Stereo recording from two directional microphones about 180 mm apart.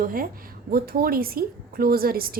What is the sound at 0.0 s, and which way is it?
A woman's voice, 50° right (ahead or behind).